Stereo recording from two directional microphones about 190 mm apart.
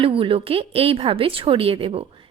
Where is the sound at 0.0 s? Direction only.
30° right (ahead or behind).